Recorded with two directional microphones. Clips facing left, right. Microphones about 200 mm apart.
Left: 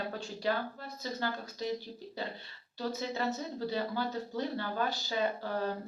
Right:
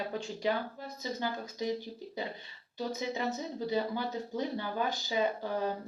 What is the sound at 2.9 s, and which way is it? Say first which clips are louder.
Speech: even; 15° right (ahead or behind).